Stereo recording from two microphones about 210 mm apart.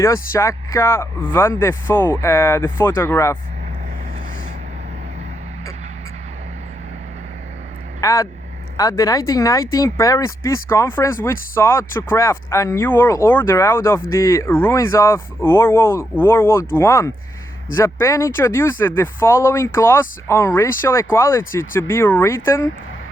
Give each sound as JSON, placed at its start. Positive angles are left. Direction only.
{"t": 0.0, "sound": "speech", "side_deg": 15}
{"t": 8.0, "sound": "speech", "side_deg": 15}